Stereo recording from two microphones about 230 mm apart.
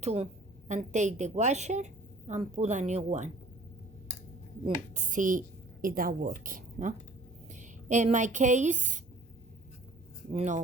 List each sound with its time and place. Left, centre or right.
0.0 s a woman's voice: right
4.6 s a woman's voice: right
10.3 s a woman's voice: right